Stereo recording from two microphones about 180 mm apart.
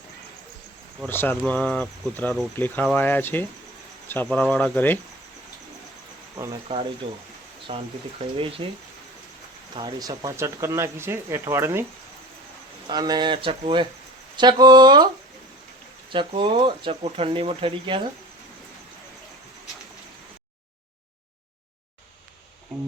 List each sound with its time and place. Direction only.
1.0 s speech: 10° left (ahead or behind)
6.3 s cricket: 20° right (ahead or behind)
7.7 s speech: 30° right (ahead or behind)
9.7 s speech: 20° right (ahead or behind)
12.9 s speech: 20° right (ahead or behind)
16.1 s speech: 30° right (ahead or behind)